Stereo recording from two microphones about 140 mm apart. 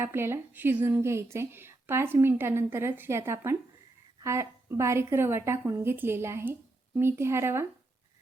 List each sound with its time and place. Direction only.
0.0 s a woman's voice: 15° right (ahead or behind)